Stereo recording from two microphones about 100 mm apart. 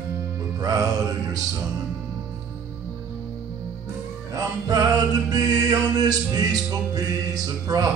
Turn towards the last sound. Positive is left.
turn(degrees=-40)  # may be behind; listen again after turning